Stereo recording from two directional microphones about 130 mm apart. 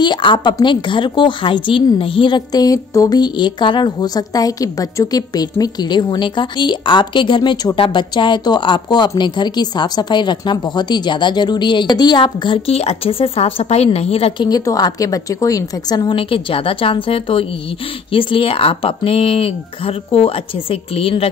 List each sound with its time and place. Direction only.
0.0 s a woman's voice: 35° left (ahead or behind)
14.5 s a woman's voice: 30° left (ahead or behind); by 21.3 s 45° left (ahead or behind)